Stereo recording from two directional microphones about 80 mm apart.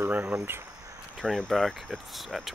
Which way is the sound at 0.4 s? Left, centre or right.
Right.